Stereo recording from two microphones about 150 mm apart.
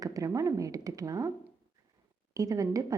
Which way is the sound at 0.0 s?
20° right (ahead or behind).